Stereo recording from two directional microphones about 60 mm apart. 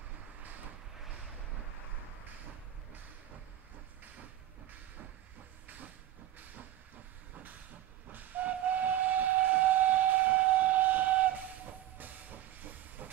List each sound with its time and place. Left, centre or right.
8.1 s train: right
12.0 s hiss: right